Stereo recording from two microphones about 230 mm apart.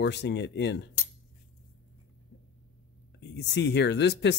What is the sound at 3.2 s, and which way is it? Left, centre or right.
Speech, left.